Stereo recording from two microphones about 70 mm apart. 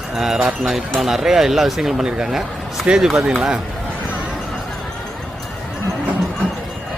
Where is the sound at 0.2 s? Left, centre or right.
Centre.